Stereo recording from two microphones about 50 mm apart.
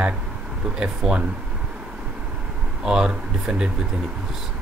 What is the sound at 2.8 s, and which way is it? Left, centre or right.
Speech, centre.